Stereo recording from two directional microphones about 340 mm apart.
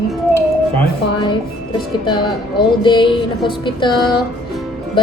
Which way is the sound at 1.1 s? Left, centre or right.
Centre.